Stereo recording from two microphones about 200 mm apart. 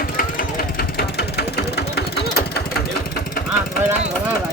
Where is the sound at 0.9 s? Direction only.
55° left (ahead or behind).